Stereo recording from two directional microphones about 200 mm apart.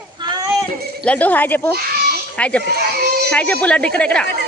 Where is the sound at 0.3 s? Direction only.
20° right (ahead or behind).